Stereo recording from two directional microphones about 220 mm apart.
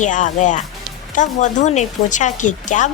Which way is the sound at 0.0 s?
35° left (ahead or behind).